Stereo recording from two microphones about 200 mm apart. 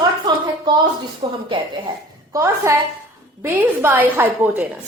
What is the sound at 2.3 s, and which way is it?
A woman's voice, 15° right (ahead or behind).